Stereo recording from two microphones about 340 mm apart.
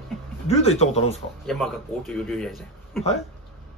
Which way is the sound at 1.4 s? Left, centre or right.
Centre.